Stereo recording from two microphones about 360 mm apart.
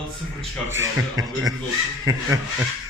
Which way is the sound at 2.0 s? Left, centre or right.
Centre.